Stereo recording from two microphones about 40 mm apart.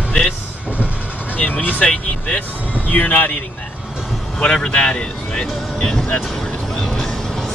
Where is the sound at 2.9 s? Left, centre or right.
Left.